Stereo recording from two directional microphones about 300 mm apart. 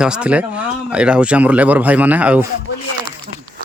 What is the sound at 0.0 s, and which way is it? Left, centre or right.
Speech, centre.